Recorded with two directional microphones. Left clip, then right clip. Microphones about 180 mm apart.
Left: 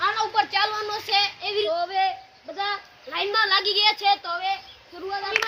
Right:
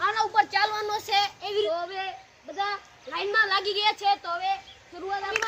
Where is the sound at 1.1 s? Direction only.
10° right (ahead or behind).